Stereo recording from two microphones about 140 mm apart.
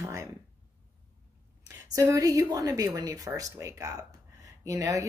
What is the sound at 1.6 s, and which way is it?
A woman's voice, 20° right (ahead or behind).